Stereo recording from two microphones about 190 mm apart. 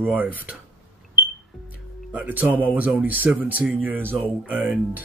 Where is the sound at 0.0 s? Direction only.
10° right (ahead or behind).